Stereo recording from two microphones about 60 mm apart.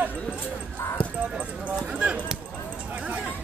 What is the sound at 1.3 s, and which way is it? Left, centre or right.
Speech, right.